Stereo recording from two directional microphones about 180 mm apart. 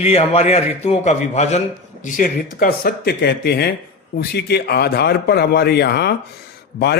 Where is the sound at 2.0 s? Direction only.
50° left (ahead or behind).